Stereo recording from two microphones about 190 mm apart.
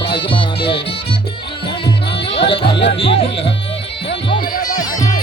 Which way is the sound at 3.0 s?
30° left (ahead or behind).